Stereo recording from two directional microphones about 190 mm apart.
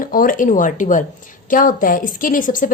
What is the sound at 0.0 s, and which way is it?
A woman's voice, 45° left (ahead or behind).